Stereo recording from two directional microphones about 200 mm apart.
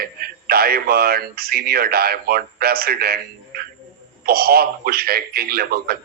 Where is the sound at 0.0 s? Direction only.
50° right (ahead or behind).